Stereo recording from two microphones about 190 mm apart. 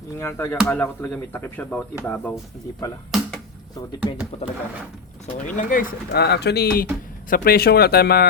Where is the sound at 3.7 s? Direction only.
20° left (ahead or behind).